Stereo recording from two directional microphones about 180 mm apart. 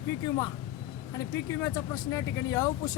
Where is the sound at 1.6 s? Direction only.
20° left (ahead or behind).